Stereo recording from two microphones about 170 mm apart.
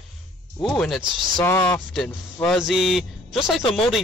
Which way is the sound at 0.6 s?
Centre (ahead or behind).